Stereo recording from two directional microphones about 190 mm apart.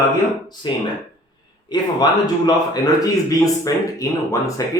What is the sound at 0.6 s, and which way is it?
A man's voice, 25° left (ahead or behind).